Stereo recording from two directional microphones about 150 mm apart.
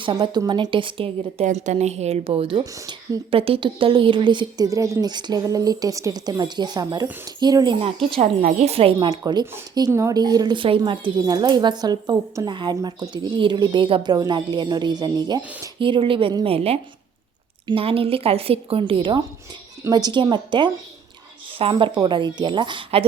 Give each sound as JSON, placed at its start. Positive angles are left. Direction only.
{"t": 0.0, "sound": "speech", "side_deg": -30}
{"t": 1.5, "sound": "speech", "side_deg": -50}
{"t": 8.2, "sound": "speech", "side_deg": -50}
{"t": 9.0, "sound": "speech", "side_deg": -25}